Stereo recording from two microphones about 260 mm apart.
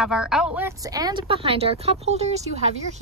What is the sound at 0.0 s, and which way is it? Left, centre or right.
Speech, centre.